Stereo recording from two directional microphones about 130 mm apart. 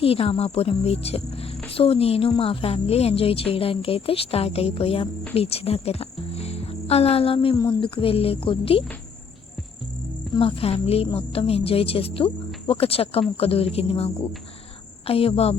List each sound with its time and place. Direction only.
0.0 s cricket: 50° left (ahead or behind)
5.3 s speech: 50° left (ahead or behind)
7.5 s speech: 30° left (ahead or behind)
7.8 s cricket: 40° left (ahead or behind)
10.3 s cricket: 40° left (ahead or behind)